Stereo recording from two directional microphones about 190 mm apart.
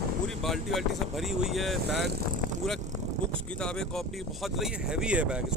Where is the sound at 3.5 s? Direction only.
5° left (ahead or behind).